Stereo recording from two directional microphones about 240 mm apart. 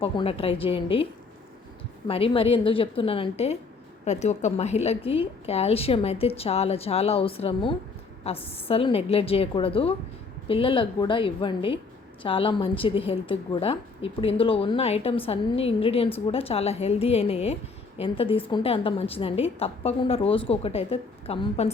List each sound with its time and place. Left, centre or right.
0.0 s a woman's voice: left
2.0 s a woman's voice: left